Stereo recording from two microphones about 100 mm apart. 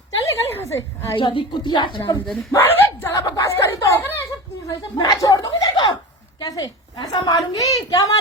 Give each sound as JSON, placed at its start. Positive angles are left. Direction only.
{"t": 0.3, "sound": "a sound", "side_deg": 30}
{"t": 1.1, "sound": "a woman's voice", "side_deg": 55}
{"t": 2.2, "sound": "speech", "side_deg": 0}
{"t": 2.6, "sound": "a sound", "side_deg": 20}
{"t": 3.3, "sound": "speech", "side_deg": 30}
{"t": 5.0, "sound": "a woman's voice", "side_deg": 40}